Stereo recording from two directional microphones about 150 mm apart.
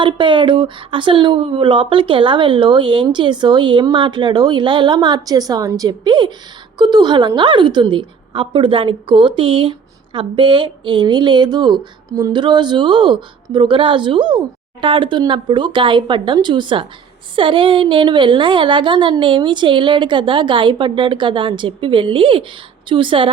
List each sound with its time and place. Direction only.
0.0 s a woman's voice: 35° right (ahead or behind)